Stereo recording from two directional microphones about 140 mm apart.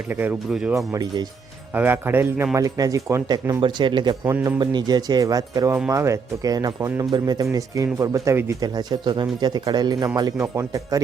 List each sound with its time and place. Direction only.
0.1 s speech: 15° right (ahead or behind)
1.7 s speech: 15° right (ahead or behind)